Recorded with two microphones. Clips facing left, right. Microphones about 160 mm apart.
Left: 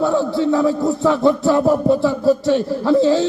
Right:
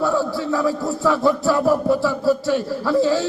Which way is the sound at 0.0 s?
25° left (ahead or behind).